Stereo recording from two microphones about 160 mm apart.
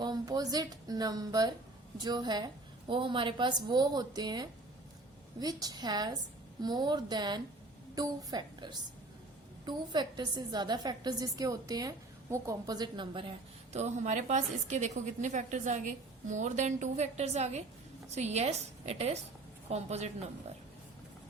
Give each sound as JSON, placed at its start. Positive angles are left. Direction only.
{"t": 0.0, "sound": "a woman's voice", "side_deg": -25}
{"t": 13.7, "sound": "a woman's voice", "side_deg": -45}